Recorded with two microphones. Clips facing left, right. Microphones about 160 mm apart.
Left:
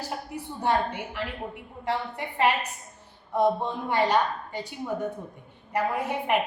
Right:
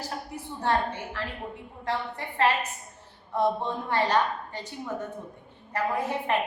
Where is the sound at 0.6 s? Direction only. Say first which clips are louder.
Left 1 dB; 15° left (ahead or behind).